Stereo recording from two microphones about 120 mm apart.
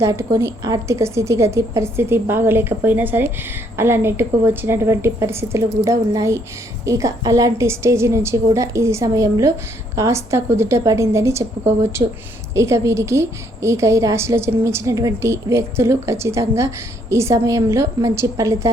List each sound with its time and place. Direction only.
0.0 s a woman's voice: 25° right (ahead or behind)